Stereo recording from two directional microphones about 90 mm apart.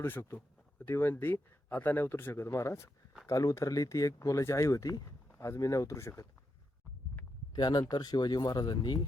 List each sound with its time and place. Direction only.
0.0 s speech: 25° left (ahead or behind)
7.5 s speech: 50° left (ahead or behind)